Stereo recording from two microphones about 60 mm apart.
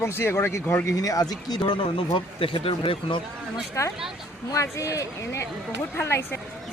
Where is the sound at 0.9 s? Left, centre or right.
Left.